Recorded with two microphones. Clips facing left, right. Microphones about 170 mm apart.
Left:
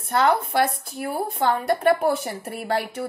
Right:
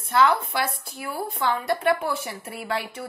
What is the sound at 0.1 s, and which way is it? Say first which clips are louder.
A woman's voice: left 1 dB; 50° left (ahead or behind).